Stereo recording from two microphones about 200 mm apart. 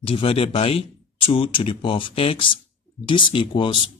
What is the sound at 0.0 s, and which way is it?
Speech, 30° left (ahead or behind).